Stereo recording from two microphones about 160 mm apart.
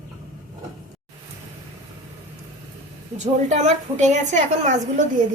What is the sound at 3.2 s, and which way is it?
A woman's voice, 45° right (ahead or behind).